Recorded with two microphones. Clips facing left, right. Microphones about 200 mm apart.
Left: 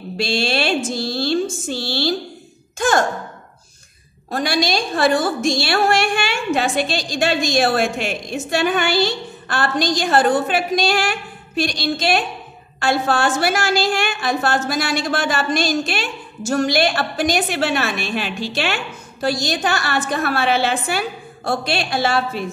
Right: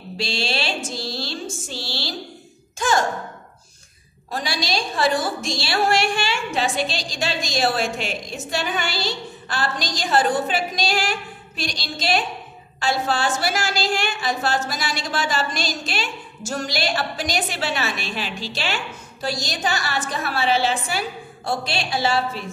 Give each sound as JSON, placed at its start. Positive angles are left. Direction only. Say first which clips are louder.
{"t": 0.2, "sound": "a woman's voice", "louder": "left 6 dB", "side_deg": 55}
{"t": 4.3, "sound": "a woman's voice", "louder": "left 6 dB", "side_deg": 55}